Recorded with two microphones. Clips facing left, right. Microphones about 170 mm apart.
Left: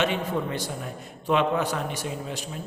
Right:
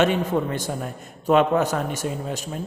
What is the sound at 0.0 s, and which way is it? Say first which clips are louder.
A man's voice: right 5 dB; 45° right (ahead or behind).